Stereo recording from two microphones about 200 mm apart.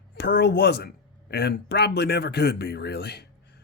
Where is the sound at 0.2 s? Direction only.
55° left (ahead or behind).